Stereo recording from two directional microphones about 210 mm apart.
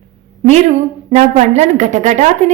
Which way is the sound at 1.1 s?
35° right (ahead or behind).